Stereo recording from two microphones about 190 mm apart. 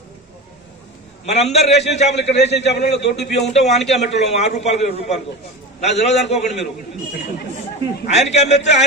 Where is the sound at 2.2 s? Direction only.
65° left (ahead or behind).